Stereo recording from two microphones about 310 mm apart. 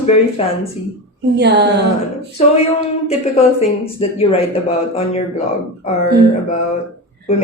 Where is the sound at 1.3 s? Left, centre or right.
Right.